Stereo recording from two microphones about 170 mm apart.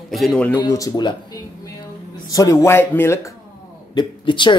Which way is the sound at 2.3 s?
20° left (ahead or behind).